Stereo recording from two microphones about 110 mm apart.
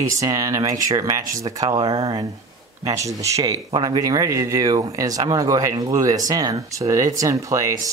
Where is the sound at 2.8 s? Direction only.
30° right (ahead or behind).